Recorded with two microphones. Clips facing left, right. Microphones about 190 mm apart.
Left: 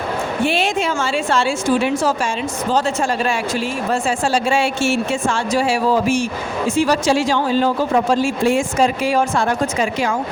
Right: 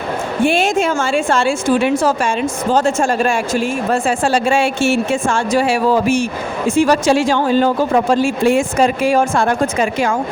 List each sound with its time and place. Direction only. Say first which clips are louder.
0.4 s a man's voice: right 5 dB; 50° right (ahead or behind)